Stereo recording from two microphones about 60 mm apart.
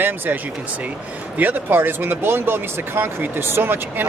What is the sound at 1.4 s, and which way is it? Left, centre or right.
Speech, right.